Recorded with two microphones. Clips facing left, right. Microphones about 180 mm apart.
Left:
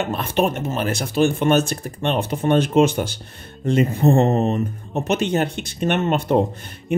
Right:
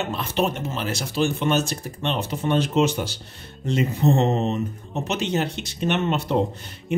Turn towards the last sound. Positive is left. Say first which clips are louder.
# left 3 dB
turn(degrees=50)  # may be behind; listen again after turning